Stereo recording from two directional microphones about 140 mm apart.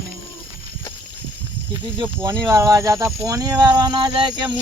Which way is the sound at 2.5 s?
20° right (ahead or behind).